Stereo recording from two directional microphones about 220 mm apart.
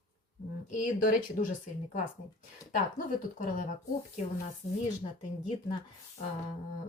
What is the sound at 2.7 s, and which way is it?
Speech, 40° left (ahead or behind).